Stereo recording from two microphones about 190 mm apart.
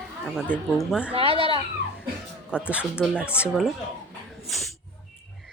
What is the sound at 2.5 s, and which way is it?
Speech, 5° right (ahead or behind).